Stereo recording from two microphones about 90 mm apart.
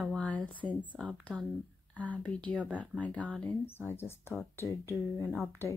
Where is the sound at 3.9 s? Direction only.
25° left (ahead or behind).